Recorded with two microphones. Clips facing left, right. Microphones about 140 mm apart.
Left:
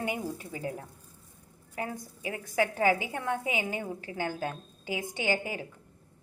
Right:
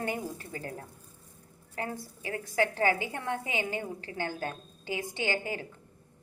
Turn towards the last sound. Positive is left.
turn(degrees=10)  # may be behind; listen again after turning